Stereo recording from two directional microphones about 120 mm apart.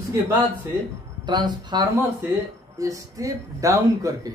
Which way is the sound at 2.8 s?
30° right (ahead or behind).